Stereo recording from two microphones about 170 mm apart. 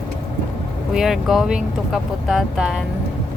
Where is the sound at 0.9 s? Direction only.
Centre (ahead or behind).